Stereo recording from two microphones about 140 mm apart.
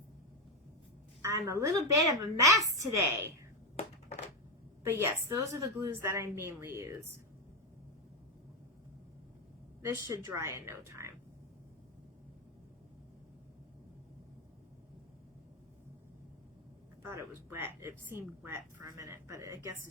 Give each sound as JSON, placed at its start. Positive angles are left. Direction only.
{"t": 1.2, "sound": "a woman's voice", "side_deg": -20}
{"t": 4.8, "sound": "a woman's voice", "side_deg": -15}
{"t": 10.1, "sound": "a woman's voice", "side_deg": -20}
{"t": 17.1, "sound": "a woman's voice", "side_deg": -20}